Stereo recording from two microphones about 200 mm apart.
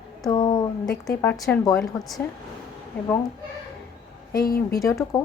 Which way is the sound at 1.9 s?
15° left (ahead or behind).